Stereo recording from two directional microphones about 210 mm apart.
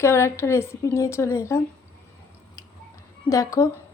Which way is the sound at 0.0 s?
10° left (ahead or behind).